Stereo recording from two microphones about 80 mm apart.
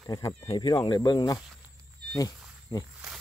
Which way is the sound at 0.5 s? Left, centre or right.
Left.